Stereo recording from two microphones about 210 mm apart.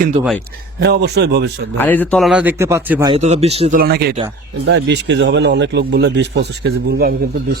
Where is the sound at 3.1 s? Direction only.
30° right (ahead or behind).